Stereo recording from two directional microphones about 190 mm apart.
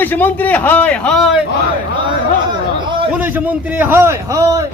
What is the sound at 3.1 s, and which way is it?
A man's voice, 10° right (ahead or behind).